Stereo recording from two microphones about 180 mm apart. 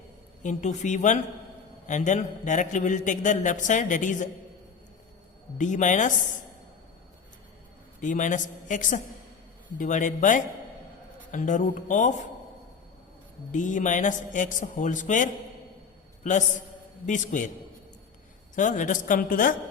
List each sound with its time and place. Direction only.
0.4 s a man's voice: 40° left (ahead or behind)
5.5 s a man's voice: 45° left (ahead or behind)
8.0 s a man's voice: 45° left (ahead or behind)
13.5 s a man's voice: 45° left (ahead or behind)
17.1 s a man's voice: 45° left (ahead or behind)
18.5 s a man's voice: 45° left (ahead or behind)